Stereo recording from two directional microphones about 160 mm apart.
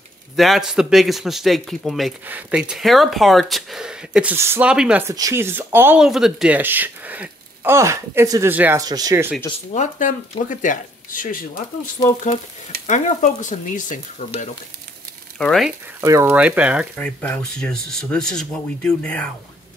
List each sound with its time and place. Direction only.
0.4 s speech: centre (ahead or behind)
5.0 s speech: 20° right (ahead or behind)
8.8 s speech: 25° right (ahead or behind)
9.7 s speech: 50° left (ahead or behind)
12.8 s frying: 50° left (ahead or behind)
15.3 s speech: centre (ahead or behind)
16.0 s speech: 20° right (ahead or behind)
16.3 s speech: 10° right (ahead or behind)
17.0 s speech: 10° left (ahead or behind)